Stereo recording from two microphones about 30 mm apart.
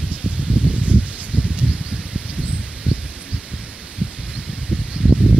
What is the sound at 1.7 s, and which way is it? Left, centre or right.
Rustling leaves, right.